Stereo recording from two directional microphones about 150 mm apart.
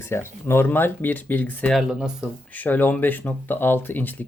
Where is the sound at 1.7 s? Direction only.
5° right (ahead or behind).